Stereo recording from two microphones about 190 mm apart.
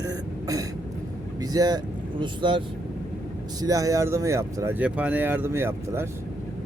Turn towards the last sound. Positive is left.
turn(degrees=-15)  # may be behind; listen again after turning